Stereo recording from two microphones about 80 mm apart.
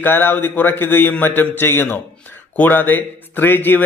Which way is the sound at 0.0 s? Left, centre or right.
Left.